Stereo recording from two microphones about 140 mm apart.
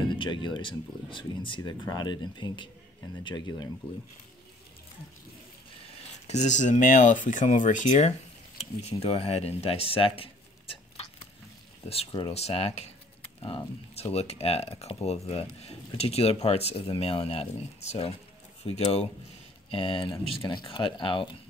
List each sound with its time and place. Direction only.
0.1 s speech: 35° left (ahead or behind)
6.2 s speech: 55° left (ahead or behind)
8.5 s speech: 45° left (ahead or behind)
12.1 s speech: 40° left (ahead or behind)
14.1 s speech: 50° left (ahead or behind)